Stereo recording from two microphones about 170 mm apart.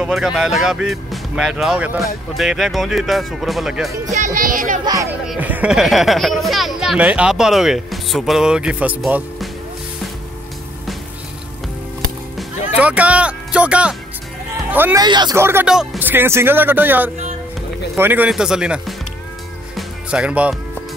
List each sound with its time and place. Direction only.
0.0 s speech: 5° right (ahead or behind)
4.2 s speech: 55° right (ahead or behind)
5.3 s speech: 10° right (ahead or behind)
12.7 s a man's voice: 10° right (ahead or behind)
15.0 s speech: 25° right (ahead or behind)
15.3 s speech: 15° right (ahead or behind)
15.7 s speech: 5° right (ahead or behind)
20.1 s speech: 5° right (ahead or behind)